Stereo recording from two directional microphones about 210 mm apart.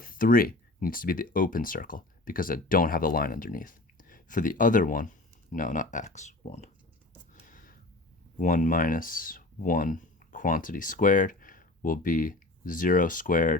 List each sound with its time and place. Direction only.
0.0 s speech: 40° left (ahead or behind)
7.3 s a sound: 40° left (ahead or behind)
8.4 s speech: 40° left (ahead or behind)